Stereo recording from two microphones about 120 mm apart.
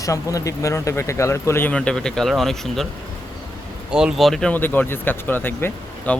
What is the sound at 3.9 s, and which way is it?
Speech, 5° right (ahead or behind).